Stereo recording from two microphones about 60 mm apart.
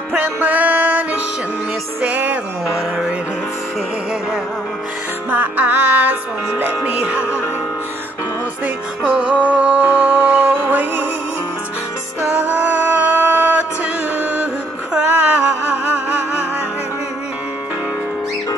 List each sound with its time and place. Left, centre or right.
0.1 s music: right
5.3 s music: right
9.1 s music: right
12.3 s music: right
15.0 s music: right